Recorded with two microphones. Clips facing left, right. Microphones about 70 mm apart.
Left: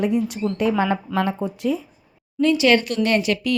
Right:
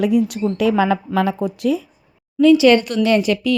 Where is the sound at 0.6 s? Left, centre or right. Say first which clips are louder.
Right 4 dB; right.